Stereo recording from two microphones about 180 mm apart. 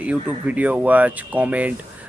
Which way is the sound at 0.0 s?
10° right (ahead or behind).